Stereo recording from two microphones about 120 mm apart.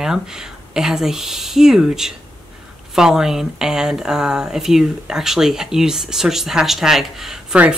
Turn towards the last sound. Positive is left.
turn(degrees=-5)  # may be behind; listen again after turning